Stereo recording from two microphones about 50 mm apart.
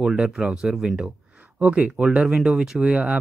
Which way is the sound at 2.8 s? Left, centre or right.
Right.